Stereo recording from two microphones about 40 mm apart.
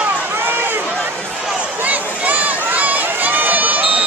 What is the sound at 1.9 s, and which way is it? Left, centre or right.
Crowd, right.